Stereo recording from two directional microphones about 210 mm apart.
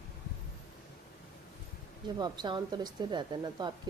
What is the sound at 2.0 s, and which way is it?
Speech, 20° right (ahead or behind).